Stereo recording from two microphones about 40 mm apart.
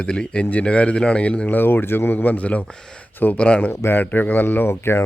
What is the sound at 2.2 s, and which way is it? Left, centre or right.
Speech, left.